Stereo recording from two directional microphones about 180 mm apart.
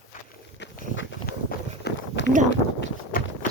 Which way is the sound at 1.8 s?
75° left (ahead or behind).